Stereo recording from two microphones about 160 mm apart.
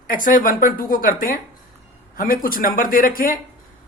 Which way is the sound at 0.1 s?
60° left (ahead or behind).